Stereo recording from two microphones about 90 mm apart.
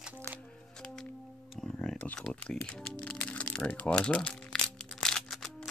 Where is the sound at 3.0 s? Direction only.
15° left (ahead or behind).